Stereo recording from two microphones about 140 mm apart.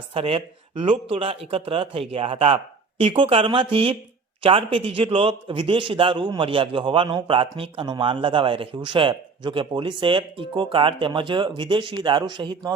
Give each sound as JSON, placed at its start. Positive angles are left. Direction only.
{"t": 0.1, "sound": "a man's voice", "side_deg": -40}